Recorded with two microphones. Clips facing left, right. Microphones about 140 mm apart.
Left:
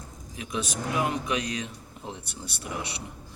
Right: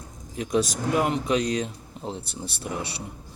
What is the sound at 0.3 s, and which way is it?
A man's voice, 40° right (ahead or behind).